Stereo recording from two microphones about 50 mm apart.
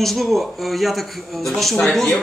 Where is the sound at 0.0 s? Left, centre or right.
Centre.